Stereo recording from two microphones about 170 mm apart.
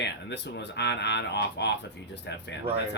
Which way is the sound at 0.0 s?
85° left.